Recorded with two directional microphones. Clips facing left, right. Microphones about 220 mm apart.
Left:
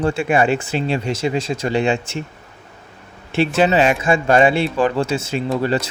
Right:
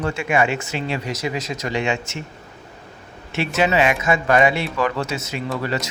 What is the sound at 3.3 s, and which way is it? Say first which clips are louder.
Speech: left 4 dB; 30° left (ahead or behind).